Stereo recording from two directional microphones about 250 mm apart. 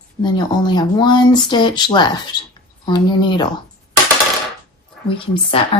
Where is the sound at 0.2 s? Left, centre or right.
Centre.